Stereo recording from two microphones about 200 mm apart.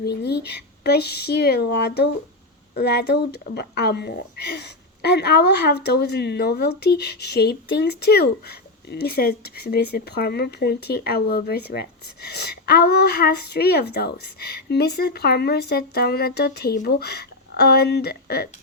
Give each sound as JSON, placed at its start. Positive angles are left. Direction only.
{"t": 0.0, "sound": "speech", "side_deg": 55}